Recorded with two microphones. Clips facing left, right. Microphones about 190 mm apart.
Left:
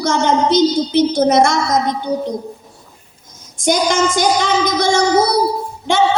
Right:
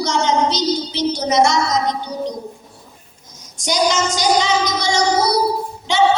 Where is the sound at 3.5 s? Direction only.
55° left (ahead or behind).